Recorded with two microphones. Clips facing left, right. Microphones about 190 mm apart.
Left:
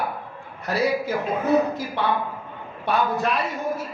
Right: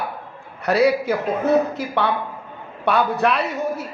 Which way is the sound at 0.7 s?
70° right (ahead or behind).